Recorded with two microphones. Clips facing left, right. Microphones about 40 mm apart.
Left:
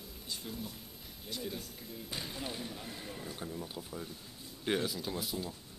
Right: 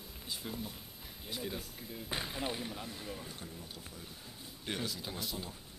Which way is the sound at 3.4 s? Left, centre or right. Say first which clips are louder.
Left 6 dB; left.